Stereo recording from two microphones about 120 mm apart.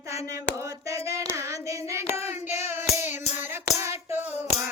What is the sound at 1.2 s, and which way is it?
Hands, 25° right (ahead or behind).